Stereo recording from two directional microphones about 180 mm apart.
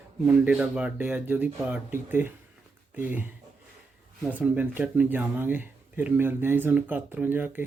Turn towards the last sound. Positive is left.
turn(degrees=-10)  # may be behind; listen again after turning